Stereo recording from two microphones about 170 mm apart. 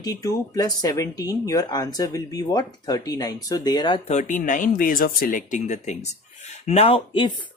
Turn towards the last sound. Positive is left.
turn(degrees=30)  # may be behind; listen again after turning